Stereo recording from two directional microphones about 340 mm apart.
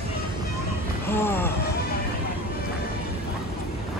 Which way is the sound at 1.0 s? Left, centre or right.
Centre.